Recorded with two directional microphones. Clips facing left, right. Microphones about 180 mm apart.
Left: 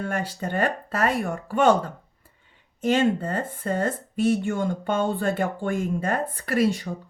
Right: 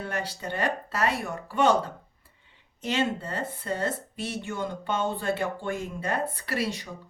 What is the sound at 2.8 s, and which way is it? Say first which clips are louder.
Speech: left 7 dB; 50° left (ahead or behind).